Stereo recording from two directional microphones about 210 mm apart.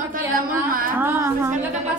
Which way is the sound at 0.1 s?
40° right (ahead or behind).